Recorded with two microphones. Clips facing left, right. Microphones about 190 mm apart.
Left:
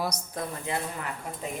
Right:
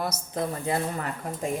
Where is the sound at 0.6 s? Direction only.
40° right (ahead or behind).